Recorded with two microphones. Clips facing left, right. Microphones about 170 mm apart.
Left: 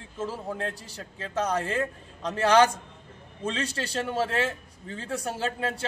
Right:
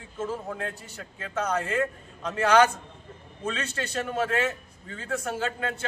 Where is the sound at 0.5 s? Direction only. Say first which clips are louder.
Left 1 dB; 30° left (ahead or behind).